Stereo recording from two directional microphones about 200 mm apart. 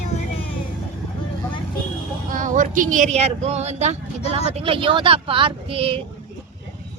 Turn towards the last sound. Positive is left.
turn(degrees=-30)  # may be behind; listen again after turning